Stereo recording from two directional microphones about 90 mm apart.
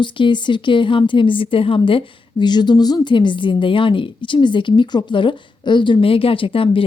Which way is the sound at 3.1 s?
65° left (ahead or behind).